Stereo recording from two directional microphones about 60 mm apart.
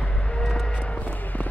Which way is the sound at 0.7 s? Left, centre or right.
Left.